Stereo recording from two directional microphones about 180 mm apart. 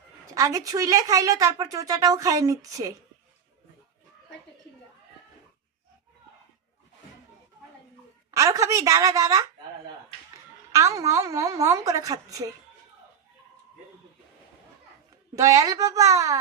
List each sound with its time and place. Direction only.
0.3 s speech: 20° right (ahead or behind)
8.3 s a woman's voice: 15° right (ahead or behind)
10.7 s speech: 20° right (ahead or behind)
15.4 s a woman's voice: 20° right (ahead or behind)